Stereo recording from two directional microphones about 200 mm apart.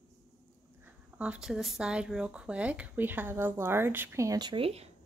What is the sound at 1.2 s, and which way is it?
Speech, 5° right (ahead or behind).